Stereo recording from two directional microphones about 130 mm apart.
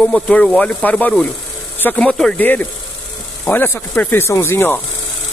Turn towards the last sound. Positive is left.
turn(degrees=20)  # may be behind; listen again after turning